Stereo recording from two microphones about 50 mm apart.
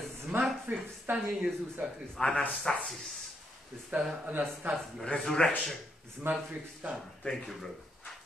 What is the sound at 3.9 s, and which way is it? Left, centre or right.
Speech, right.